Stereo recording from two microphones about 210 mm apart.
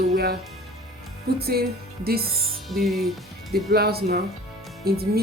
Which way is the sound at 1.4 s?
50° right (ahead or behind).